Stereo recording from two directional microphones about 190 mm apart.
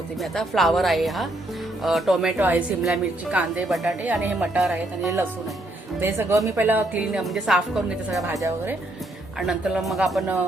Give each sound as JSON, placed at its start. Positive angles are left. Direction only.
{"t": 0.2, "sound": "a woman's voice", "side_deg": 0}
{"t": 8.3, "sound": "a woman's voice", "side_deg": -15}
{"t": 9.5, "sound": "a woman's voice", "side_deg": 0}